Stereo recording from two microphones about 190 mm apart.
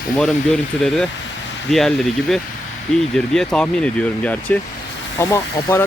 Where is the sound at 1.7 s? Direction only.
Centre (ahead or behind).